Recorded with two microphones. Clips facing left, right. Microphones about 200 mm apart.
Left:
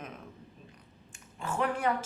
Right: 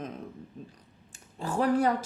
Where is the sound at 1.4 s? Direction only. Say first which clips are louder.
Right 6 dB; 35° right (ahead or behind).